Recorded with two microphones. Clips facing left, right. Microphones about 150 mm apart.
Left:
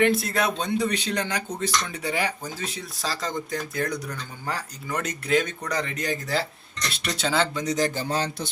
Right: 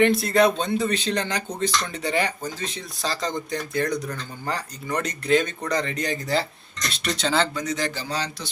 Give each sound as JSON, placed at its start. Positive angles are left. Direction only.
{"t": 0.0, "sound": "speech", "side_deg": 5}
{"t": 7.5, "sound": "a man's voice", "side_deg": 35}